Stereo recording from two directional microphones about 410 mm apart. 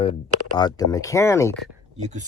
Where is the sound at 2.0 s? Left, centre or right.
Centre.